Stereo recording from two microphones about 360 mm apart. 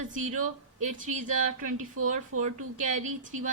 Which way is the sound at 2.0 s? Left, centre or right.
Right.